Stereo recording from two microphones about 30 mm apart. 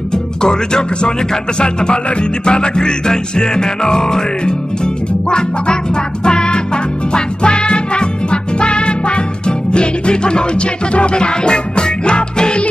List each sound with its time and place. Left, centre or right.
0.1 s music: left